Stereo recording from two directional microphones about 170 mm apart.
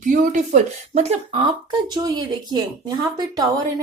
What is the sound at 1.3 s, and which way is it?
A woman's voice, 25° right (ahead or behind).